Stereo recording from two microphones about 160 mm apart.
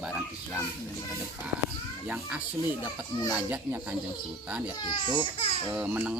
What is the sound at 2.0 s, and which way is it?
Speech, 10° right (ahead or behind).